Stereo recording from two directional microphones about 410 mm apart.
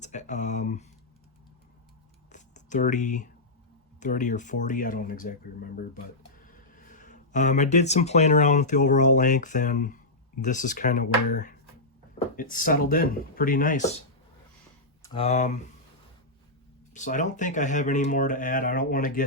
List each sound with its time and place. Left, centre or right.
0.0 s speech: centre
2.3 s a sound: centre
4.0 s speech: centre
6.4 s speech: centre
15.0 s speech: centre
16.9 s speech: centre